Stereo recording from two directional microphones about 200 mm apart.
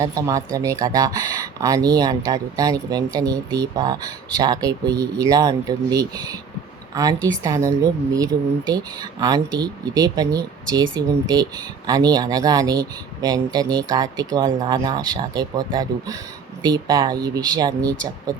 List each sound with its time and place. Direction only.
0.0 s a woman's voice: 15° right (ahead or behind)